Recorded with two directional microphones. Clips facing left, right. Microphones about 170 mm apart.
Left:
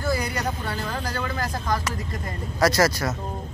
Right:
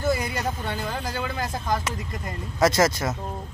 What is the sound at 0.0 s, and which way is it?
Speech, 20° right (ahead or behind).